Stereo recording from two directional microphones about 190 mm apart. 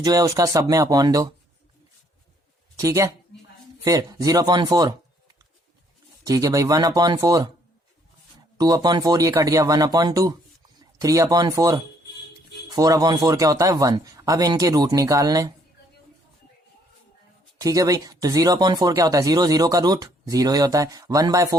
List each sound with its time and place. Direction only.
0.0 s speech: 20° right (ahead or behind)
2.7 s a woman's voice: 15° right (ahead or behind)
6.2 s speech: 20° right (ahead or behind)
8.5 s speech: 20° right (ahead or behind)
17.6 s speech: 20° right (ahead or behind)